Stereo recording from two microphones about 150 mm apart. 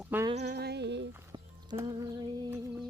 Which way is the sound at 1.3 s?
30° right (ahead or behind).